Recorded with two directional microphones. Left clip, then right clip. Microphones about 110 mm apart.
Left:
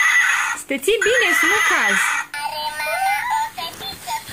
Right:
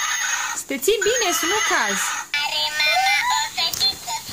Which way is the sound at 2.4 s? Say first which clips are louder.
Right 3 dB; 45° right (ahead or behind).